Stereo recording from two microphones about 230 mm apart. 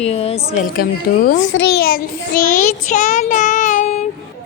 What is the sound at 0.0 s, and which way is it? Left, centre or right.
Speech, left.